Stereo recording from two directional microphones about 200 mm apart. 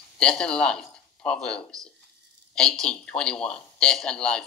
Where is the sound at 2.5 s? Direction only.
5° left (ahead or behind).